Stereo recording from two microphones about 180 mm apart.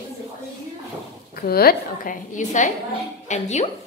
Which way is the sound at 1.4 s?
55° left (ahead or behind).